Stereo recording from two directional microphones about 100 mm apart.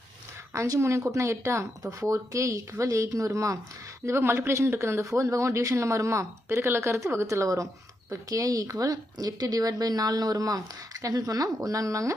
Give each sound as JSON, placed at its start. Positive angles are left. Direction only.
{"t": 0.5, "sound": "speech", "side_deg": -30}